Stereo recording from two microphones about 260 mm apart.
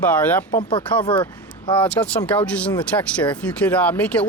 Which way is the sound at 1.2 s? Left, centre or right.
Centre.